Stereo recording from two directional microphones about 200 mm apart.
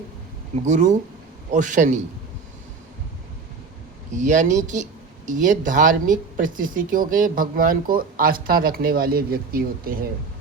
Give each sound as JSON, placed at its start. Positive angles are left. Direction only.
{"t": 0.6, "sound": "a man's voice", "side_deg": -35}
{"t": 4.1, "sound": "speech", "side_deg": -40}